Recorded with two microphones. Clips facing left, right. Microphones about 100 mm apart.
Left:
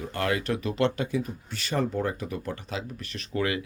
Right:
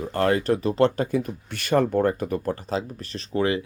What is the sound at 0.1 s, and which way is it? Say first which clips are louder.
Speech: right 7 dB; 35° right (ahead or behind).